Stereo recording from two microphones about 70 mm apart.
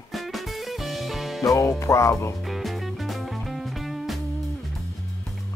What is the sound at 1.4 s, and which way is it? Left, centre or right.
Speech, left.